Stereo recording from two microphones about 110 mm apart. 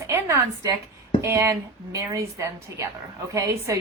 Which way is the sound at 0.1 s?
25° right (ahead or behind).